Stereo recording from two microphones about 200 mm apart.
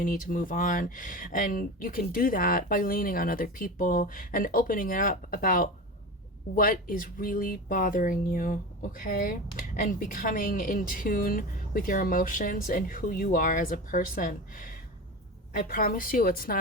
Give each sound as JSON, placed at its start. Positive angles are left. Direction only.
{"t": 0.0, "sound": "speech", "side_deg": 45}